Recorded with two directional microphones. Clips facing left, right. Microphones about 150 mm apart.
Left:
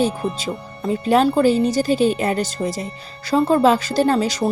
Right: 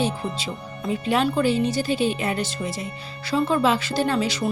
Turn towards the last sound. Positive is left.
turn(degrees=40)  # may be behind; listen again after turning